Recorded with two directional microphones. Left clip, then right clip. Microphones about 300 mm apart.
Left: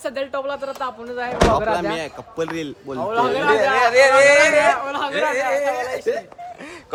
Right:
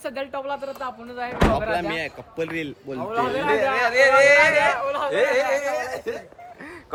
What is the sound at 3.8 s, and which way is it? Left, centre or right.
Speech, left.